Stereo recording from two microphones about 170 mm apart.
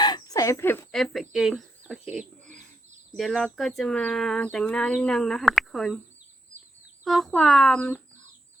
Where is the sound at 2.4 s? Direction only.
45° right (ahead or behind).